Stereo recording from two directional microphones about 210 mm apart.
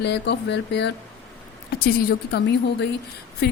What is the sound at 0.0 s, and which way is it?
Speech, 55° left (ahead or behind).